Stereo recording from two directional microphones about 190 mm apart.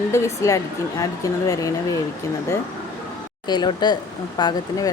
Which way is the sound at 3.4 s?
20° left (ahead or behind).